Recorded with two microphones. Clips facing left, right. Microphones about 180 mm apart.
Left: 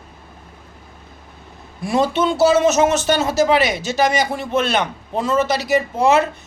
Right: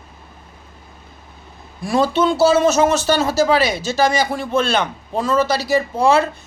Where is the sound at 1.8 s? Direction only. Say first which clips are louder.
Right 1 dB; 20° left (ahead or behind).